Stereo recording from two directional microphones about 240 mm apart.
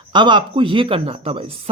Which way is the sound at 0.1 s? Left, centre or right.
Centre.